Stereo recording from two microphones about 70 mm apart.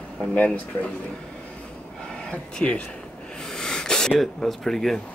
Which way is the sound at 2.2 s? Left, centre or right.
Centre.